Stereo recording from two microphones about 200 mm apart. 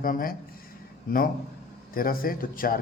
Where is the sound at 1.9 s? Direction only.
45° left (ahead or behind).